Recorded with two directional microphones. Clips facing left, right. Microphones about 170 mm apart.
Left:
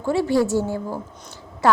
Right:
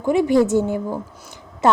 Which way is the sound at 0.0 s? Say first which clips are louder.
Right 3 dB; 15° right (ahead or behind).